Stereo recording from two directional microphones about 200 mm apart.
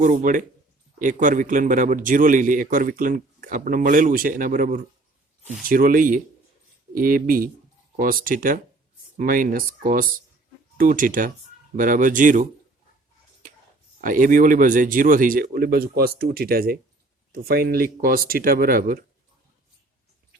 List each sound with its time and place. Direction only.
0.0 s a man's voice: 40° right (ahead or behind)
14.0 s speech: 40° right (ahead or behind)